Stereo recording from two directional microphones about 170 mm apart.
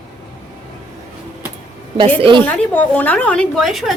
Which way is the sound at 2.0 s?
30° right (ahead or behind).